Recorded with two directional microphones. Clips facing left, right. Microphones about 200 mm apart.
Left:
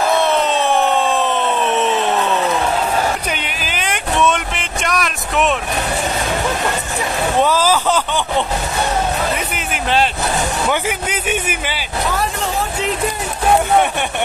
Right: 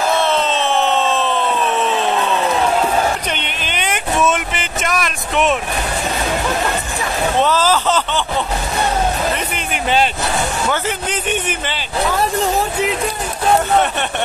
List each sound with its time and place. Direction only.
0.2 s a sound: 15° left (ahead or behind)
3.3 s vehicle: 5° left (ahead or behind)
7.4 s speech: 10° left (ahead or behind)
10.7 s a man's voice: 10° left (ahead or behind)